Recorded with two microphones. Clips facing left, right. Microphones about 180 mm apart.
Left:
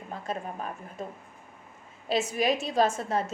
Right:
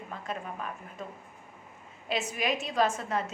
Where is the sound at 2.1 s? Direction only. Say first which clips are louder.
Left 5 dB; 30° left (ahead or behind).